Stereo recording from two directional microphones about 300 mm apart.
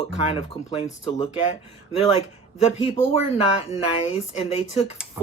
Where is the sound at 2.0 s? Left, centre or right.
Left.